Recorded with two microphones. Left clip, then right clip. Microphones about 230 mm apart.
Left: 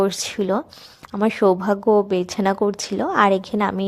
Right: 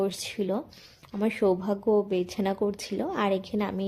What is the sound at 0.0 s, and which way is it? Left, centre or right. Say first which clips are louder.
Speech: left 8 dB; left.